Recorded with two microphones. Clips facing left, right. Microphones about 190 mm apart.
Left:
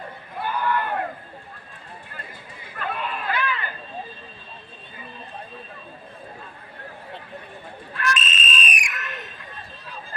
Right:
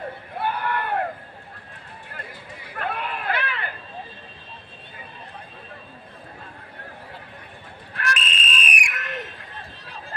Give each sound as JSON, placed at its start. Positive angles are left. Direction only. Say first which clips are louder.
{"t": 0.4, "sound": "a sound", "louder": "left 2 dB", "side_deg": -60}
{"t": 2.7, "sound": "run", "louder": "even", "side_deg": -60}
{"t": 7.9, "sound": "fire alarm", "louder": "left 2 dB", "side_deg": -60}